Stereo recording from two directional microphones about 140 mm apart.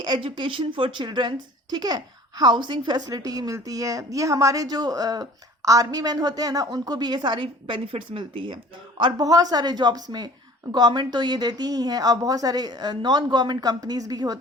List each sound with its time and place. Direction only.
0.0 s a woman's voice: 35° right (ahead or behind)